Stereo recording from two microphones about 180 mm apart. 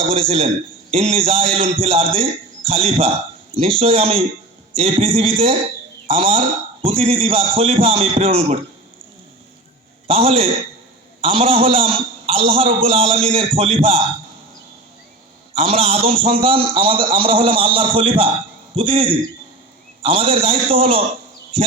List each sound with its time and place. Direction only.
0.1 s a man's voice: 35° right (ahead or behind)
10.1 s a man's voice: 30° right (ahead or behind)
15.5 s a man's voice: 30° right (ahead or behind)